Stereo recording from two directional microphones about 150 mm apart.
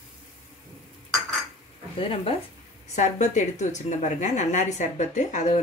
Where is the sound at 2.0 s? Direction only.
40° left (ahead or behind).